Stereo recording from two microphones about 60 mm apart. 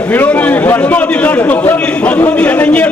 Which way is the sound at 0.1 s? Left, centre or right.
Left.